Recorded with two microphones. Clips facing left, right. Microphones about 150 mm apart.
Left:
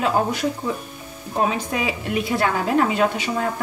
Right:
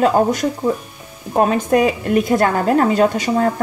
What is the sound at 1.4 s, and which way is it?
A woman's voice, 55° right (ahead or behind).